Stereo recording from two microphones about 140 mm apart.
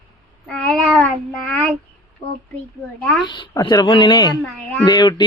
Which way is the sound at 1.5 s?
10° left (ahead or behind).